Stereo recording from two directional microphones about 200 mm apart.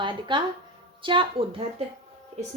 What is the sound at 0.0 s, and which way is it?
Speech, 25° right (ahead or behind).